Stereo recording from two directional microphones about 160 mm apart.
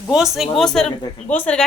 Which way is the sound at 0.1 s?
5° right (ahead or behind).